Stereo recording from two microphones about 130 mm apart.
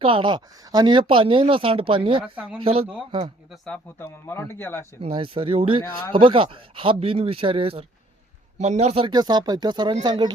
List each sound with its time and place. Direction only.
0.0 s speech: 40° right (ahead or behind)
3.7 s speech: 20° left (ahead or behind)
4.9 s speech: 45° right (ahead or behind)
8.5 s a man's voice: 60° right (ahead or behind)
9.0 s speech: 35° right (ahead or behind)